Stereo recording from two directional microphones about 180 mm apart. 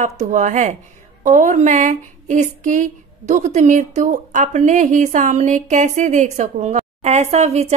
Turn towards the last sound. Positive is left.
turn(degrees=-35)  # may be behind; listen again after turning